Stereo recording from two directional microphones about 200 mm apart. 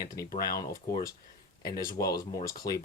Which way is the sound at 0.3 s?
20° left (ahead or behind).